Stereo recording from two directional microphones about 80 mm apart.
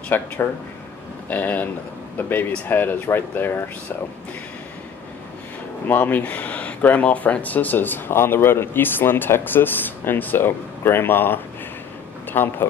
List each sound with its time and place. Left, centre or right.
0.1 s speech: left
1.3 s speech: left
5.9 s speech: left